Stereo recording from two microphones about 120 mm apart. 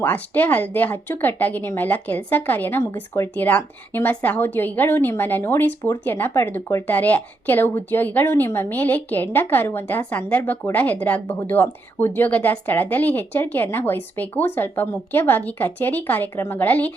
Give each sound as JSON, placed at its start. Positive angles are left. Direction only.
{"t": 0.0, "sound": "speech", "side_deg": 15}